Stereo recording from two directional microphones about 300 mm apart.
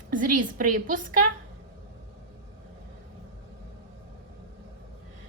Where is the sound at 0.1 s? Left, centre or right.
Right.